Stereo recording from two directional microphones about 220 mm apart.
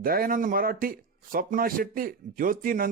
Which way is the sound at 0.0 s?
40° right (ahead or behind).